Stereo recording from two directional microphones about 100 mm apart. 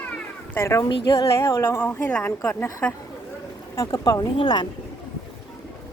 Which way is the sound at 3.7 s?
40° left (ahead or behind).